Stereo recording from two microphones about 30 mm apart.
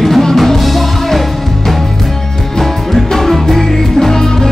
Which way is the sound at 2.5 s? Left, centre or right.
Centre.